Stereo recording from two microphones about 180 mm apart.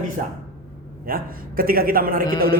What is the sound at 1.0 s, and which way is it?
A man's voice, 55° right (ahead or behind).